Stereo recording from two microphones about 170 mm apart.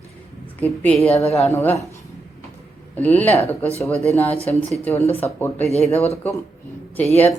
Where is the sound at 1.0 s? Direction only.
40° left (ahead or behind).